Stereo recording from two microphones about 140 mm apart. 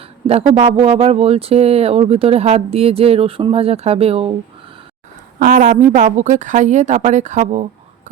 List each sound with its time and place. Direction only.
0.3 s speech: 45° right (ahead or behind)
5.4 s a woman's voice: 70° right (ahead or behind)